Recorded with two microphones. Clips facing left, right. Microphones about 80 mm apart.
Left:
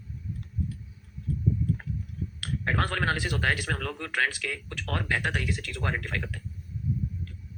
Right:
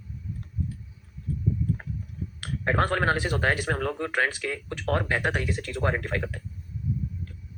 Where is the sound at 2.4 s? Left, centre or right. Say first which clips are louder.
Right 4 dB; right.